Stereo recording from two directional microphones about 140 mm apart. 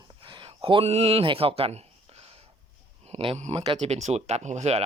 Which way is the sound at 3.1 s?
45° right (ahead or behind).